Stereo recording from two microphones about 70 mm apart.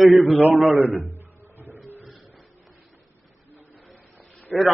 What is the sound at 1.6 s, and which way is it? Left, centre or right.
Music, right.